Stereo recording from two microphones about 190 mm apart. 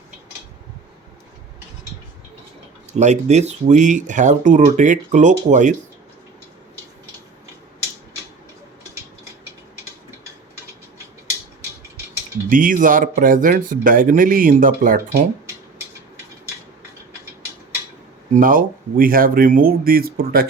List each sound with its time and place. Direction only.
2.9 s speech: 40° right (ahead or behind)
12.5 s speech: 45° right (ahead or behind)
18.3 s speech: 45° right (ahead or behind)